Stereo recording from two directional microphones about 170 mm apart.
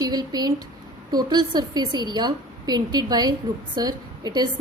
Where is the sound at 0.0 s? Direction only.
25° right (ahead or behind).